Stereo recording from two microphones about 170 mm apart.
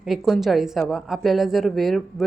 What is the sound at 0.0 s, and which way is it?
A woman's voice, centre (ahead or behind).